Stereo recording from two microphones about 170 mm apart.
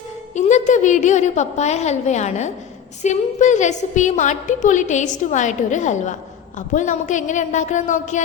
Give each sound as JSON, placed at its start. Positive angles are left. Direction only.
{"t": 0.3, "sound": "a woman's voice", "side_deg": 45}